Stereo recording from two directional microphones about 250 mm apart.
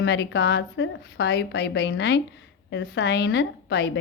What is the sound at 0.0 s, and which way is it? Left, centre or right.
A woman's voice, left.